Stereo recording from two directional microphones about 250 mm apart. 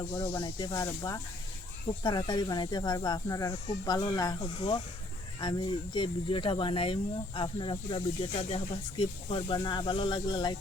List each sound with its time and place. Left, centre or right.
0.2 s speech: centre